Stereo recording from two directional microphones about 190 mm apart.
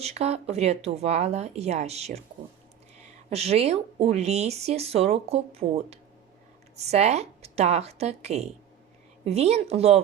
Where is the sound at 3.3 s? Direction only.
35° right (ahead or behind).